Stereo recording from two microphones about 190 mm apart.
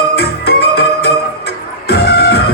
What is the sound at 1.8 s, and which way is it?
Music, 55° left (ahead or behind).